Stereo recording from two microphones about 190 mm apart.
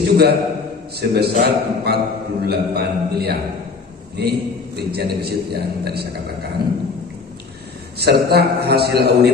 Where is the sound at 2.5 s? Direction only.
55° right (ahead or behind).